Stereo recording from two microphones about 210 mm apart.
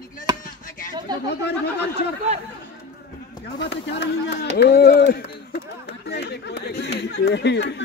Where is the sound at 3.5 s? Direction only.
55° left (ahead or behind).